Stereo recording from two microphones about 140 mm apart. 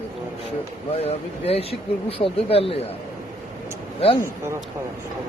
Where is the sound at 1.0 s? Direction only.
45° left (ahead or behind).